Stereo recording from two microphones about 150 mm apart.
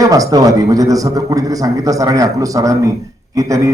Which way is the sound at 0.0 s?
25° right (ahead or behind).